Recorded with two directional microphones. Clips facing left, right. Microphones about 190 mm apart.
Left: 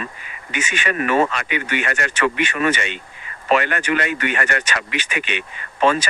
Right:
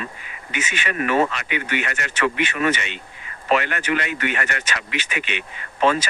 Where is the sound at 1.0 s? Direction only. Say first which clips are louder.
Left 1 dB; 65° left (ahead or behind).